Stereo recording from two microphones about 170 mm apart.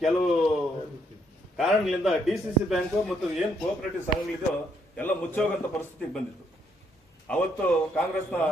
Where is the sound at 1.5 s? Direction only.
Centre (ahead or behind).